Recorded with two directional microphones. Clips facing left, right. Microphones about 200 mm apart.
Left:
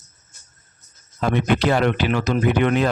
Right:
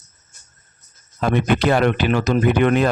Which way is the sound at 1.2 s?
50° right (ahead or behind).